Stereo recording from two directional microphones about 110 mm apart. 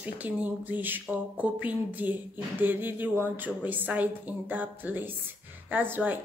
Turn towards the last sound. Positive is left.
turn(degrees=-15)  # may be behind; listen again after turning